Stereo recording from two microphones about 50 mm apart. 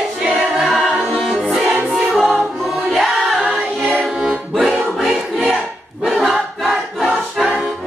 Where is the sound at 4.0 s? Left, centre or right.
Centre.